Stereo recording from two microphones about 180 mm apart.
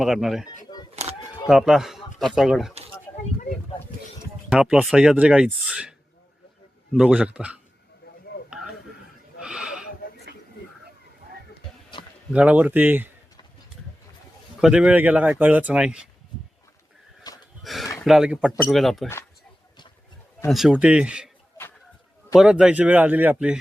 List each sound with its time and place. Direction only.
0.0 s speech: centre (ahead or behind)
0.6 s a sound: 25° left (ahead or behind)
1.5 s speech: centre (ahead or behind)
4.4 s speech: 5° right (ahead or behind)
6.9 s speech: 5° right (ahead or behind)
9.4 s a sound: 5° right (ahead or behind)
12.3 s speech: 5° right (ahead or behind)
14.6 s speech: 5° right (ahead or behind)
17.6 s a sound: centre (ahead or behind)
17.9 s speech: centre (ahead or behind)
20.5 s speech: 5° right (ahead or behind)
22.4 s speech: 5° right (ahead or behind)